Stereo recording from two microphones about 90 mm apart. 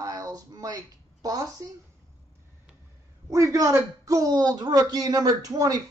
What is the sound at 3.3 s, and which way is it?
Speech, 35° right (ahead or behind).